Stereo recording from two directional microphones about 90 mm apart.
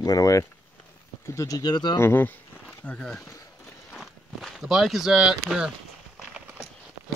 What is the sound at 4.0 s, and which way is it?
Speech, centre (ahead or behind).